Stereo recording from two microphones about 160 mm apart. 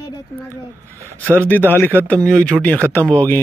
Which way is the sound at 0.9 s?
20° right (ahead or behind).